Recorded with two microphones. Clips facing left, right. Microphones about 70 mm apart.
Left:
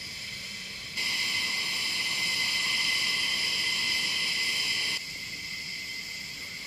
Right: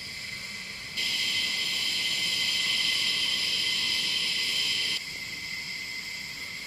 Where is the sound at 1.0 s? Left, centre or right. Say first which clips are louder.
Left 1 dB; left.